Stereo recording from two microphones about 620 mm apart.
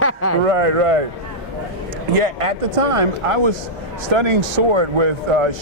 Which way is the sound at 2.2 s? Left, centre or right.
Right.